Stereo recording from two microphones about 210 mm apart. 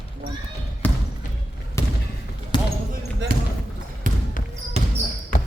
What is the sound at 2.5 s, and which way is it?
Basketball bounce, 20° left (ahead or behind).